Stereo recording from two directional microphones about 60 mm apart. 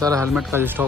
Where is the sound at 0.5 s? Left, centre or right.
Right.